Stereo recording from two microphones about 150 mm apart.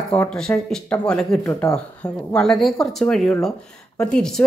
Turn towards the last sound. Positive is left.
turn(degrees=5)  # may be behind; listen again after turning